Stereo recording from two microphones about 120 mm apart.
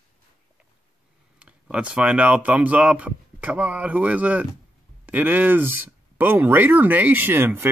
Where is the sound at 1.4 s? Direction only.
10° right (ahead or behind).